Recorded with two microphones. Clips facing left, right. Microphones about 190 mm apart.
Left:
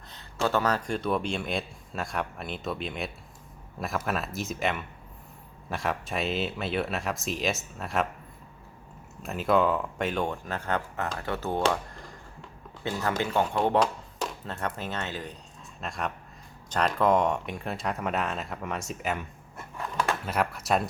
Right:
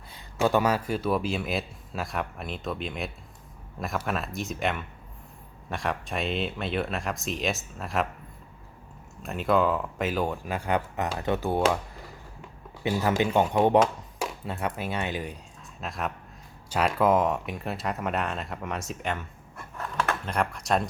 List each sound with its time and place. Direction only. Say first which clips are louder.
0.1 s speech: right 3 dB; 10° right (ahead or behind)
9.2 s speech: even; centre (ahead or behind)
11.6 s a sound: right 2 dB; 5° right (ahead or behind)
12.8 s speech: right 4 dB; 10° right (ahead or behind)
15.8 s speech: right 1 dB; centre (ahead or behind)
20.2 s speech: even; 5° left (ahead or behind)